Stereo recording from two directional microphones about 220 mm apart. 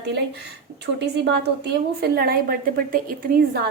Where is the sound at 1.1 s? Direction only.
50° right (ahead or behind).